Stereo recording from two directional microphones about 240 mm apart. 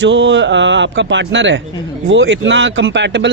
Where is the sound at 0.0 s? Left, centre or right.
Right.